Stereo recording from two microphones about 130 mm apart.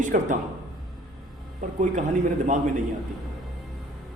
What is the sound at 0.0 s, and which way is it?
Speech, 80° right.